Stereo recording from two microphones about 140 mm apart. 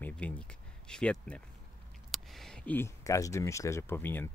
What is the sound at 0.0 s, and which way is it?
Speech, 10° left (ahead or behind).